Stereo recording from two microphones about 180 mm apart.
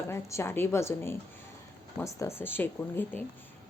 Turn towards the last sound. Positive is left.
turn(degrees=10)  # may be behind; listen again after turning